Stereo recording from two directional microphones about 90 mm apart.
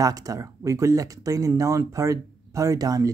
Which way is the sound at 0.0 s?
40° right (ahead or behind).